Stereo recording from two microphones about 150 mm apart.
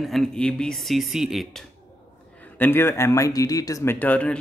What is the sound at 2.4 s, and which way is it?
Speech, 10° left (ahead or behind).